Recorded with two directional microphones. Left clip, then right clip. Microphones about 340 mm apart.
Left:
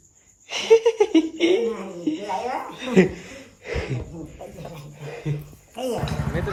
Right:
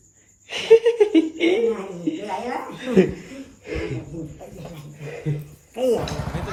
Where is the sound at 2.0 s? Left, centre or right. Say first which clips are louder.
Left 3 dB; centre.